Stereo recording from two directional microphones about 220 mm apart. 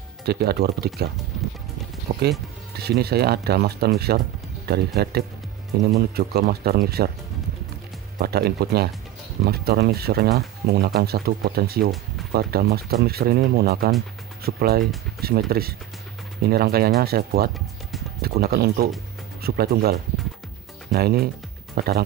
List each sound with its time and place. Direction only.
0.2 s speech: 45° right (ahead or behind)
2.1 s speech: 40° right (ahead or behind)
8.2 s speech: 45° right (ahead or behind)